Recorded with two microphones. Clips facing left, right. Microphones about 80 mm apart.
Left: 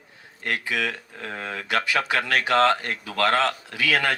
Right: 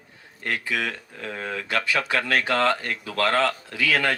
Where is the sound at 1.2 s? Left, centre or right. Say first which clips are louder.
Right 1 dB; left.